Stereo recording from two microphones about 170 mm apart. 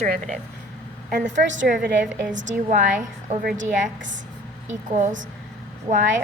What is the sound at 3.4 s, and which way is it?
Speech, 90° right.